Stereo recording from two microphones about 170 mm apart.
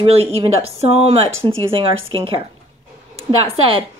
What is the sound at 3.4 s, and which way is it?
Speech, 35° right (ahead or behind).